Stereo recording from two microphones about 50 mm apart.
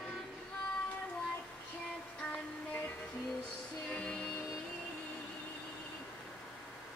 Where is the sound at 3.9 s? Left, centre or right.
Left.